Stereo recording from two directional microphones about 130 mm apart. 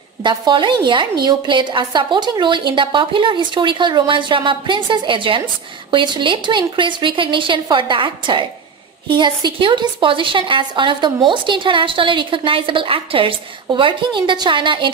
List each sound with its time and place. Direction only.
0.2 s a woman's voice: 35° right (ahead or behind)